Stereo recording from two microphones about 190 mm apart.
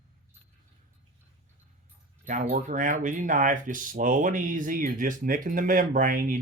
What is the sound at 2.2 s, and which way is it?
Speech, 40° right (ahead or behind).